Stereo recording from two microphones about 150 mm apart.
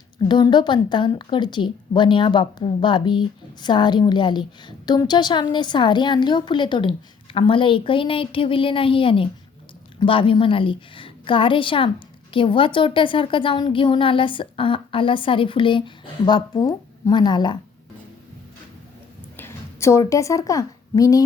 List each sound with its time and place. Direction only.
0.3 s a woman's voice: 30° left (ahead or behind)
19.4 s a woman's voice: 15° left (ahead or behind)